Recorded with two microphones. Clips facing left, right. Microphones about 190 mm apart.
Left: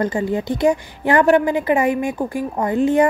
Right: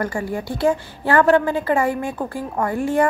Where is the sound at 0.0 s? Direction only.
20° left (ahead or behind).